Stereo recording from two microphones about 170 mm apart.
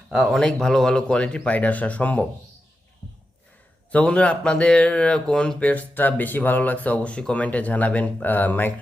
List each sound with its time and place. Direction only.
0.1 s speech: 5° right (ahead or behind)
3.9 s speech: 5° left (ahead or behind)